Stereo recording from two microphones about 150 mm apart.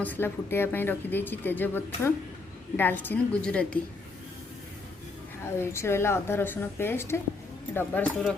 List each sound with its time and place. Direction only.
0.0 s speech: 15° left (ahead or behind)
5.5 s speech: 15° left (ahead or behind)